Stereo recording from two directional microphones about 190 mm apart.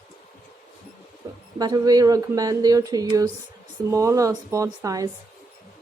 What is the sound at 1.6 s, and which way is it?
Speech, 20° right (ahead or behind).